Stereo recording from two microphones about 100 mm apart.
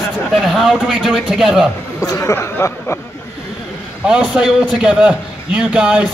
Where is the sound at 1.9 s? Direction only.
30° left (ahead or behind).